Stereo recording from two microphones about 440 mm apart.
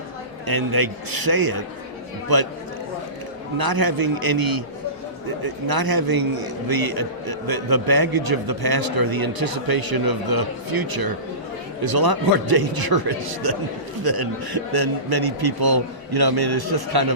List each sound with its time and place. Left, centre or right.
0.4 s a man's voice: right
3.6 s a man's voice: right